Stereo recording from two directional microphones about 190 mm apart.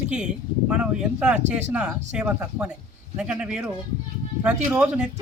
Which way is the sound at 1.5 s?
35° right (ahead or behind).